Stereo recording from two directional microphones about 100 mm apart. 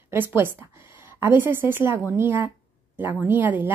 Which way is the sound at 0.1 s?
20° right (ahead or behind).